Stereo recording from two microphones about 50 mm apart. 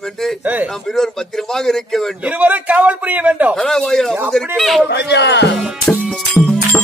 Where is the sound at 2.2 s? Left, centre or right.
Right.